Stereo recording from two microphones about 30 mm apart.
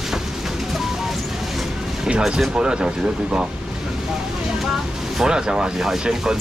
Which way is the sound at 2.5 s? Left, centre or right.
Right.